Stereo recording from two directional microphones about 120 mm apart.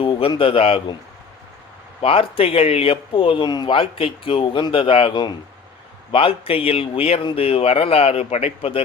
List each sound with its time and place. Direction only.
0.0 s speech: 45° left (ahead or behind)
2.0 s speech: 50° left (ahead or behind)
5.1 s speech: 35° left (ahead or behind)
6.1 s speech: 50° left (ahead or behind)